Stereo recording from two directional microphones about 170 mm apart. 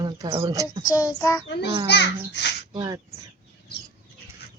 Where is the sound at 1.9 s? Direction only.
90° left.